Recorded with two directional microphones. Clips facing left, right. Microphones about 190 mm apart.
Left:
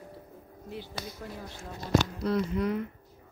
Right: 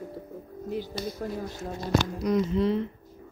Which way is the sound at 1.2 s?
45° right (ahead or behind).